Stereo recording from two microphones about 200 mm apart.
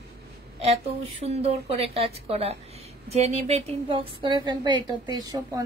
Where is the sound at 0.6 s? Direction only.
30° right (ahead or behind).